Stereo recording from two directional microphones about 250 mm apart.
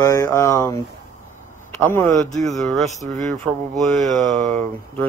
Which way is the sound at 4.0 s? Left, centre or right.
Right.